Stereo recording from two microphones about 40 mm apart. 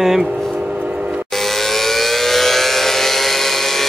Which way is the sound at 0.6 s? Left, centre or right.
Right.